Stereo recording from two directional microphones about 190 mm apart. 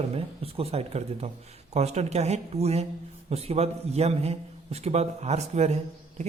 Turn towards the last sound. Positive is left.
turn(degrees=-35)  # may be behind; listen again after turning